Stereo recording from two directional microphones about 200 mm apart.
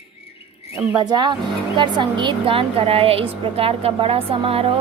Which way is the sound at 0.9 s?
20° right (ahead or behind).